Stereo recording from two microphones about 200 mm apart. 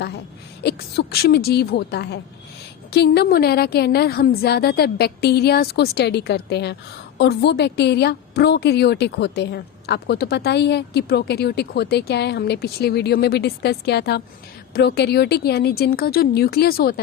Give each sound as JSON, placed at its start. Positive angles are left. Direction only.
{"t": 0.6, "sound": "a woman's voice", "side_deg": 50}